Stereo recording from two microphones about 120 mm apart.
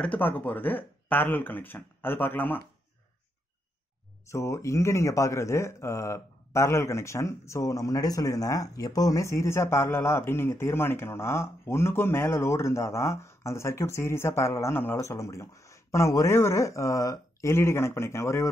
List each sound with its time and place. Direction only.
0.0 s speech: 15° left (ahead or behind)
4.3 s speech: 25° left (ahead or behind)